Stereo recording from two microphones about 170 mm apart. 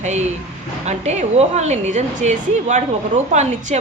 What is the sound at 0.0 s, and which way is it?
A woman's voice, 40° right (ahead or behind).